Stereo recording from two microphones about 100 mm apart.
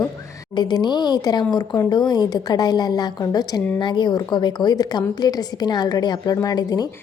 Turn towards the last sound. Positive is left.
turn(degrees=40)  # may be behind; listen again after turning